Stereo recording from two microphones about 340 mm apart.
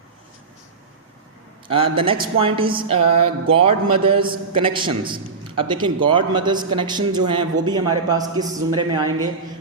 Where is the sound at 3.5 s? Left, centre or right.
Centre.